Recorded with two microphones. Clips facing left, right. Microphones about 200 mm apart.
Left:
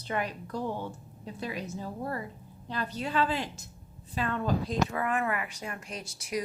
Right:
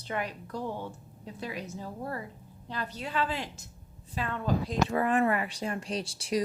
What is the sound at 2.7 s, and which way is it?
Speech, 15° right (ahead or behind).